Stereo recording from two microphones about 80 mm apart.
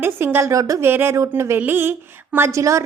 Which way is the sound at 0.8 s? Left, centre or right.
Right.